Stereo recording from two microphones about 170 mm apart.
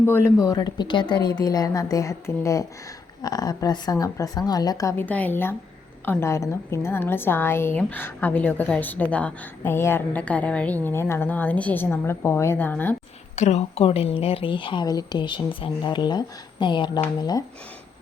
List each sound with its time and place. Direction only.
0.0 s a woman's voice: 15° left (ahead or behind)
13.3 s a woman's voice: 40° left (ahead or behind); by 17.4 s 20° left (ahead or behind)